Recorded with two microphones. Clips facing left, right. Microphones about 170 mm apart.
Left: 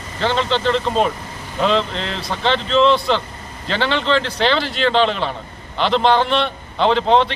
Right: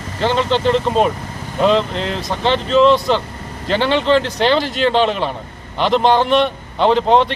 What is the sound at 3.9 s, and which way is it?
Speech, 10° right (ahead or behind).